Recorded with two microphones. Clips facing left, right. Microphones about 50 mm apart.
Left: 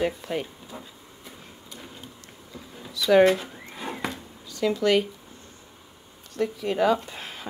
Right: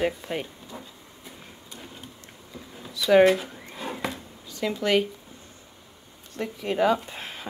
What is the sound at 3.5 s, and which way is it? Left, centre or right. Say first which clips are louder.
Drawer open or close: even; centre.